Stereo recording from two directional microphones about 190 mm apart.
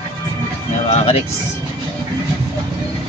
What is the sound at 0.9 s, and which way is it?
Music, 35° left (ahead or behind).